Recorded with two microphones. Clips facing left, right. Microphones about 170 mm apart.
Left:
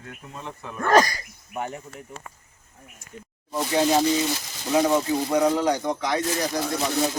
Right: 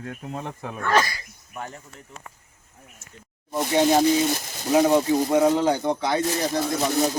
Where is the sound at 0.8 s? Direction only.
40° left (ahead or behind).